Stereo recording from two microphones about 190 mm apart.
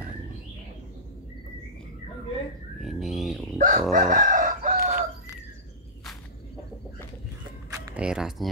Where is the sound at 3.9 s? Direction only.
45° right (ahead or behind).